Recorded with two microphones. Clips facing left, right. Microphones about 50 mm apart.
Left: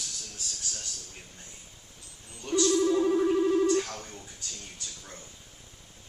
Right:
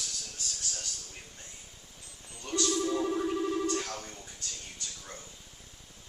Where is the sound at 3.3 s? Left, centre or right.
Centre.